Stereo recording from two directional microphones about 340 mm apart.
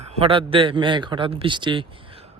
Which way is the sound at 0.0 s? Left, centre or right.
Centre.